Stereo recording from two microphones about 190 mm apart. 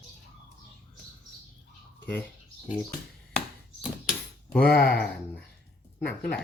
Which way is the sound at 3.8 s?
Centre (ahead or behind).